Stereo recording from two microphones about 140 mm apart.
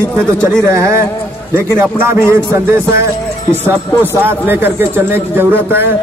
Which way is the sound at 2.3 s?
20° right (ahead or behind).